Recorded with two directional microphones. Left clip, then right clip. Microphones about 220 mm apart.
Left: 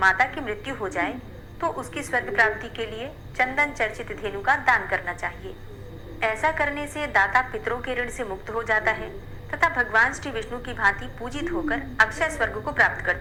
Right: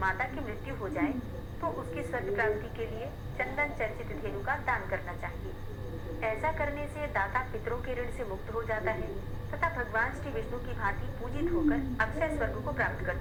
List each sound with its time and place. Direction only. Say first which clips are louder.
0.0 s a woman's voice: left 11 dB; 40° left (ahead or behind)